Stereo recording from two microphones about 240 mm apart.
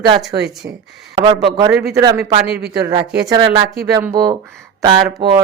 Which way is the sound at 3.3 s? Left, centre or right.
Centre.